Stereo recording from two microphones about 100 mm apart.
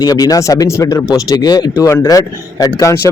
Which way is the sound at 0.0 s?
40° left (ahead or behind).